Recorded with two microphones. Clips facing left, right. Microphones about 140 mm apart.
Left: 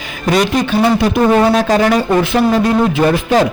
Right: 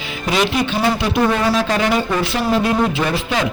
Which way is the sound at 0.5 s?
45° left (ahead or behind).